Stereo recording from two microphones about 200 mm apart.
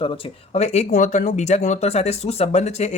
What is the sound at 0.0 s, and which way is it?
Speech, 25° left (ahead or behind).